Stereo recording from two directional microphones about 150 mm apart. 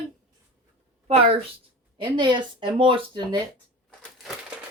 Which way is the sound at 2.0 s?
30° right (ahead or behind).